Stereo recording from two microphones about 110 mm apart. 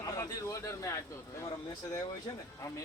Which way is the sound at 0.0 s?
35° left (ahead or behind).